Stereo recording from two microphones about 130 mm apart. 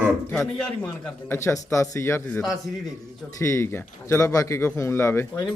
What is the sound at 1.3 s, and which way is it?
Speech, 20° left (ahead or behind).